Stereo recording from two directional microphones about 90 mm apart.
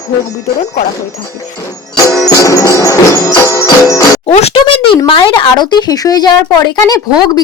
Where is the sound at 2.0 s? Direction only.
35° left (ahead or behind).